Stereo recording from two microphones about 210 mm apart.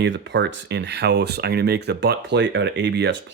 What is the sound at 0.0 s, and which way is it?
Speech, 55° right (ahead or behind).